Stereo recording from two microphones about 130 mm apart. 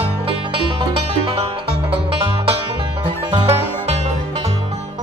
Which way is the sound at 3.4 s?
55° right (ahead or behind).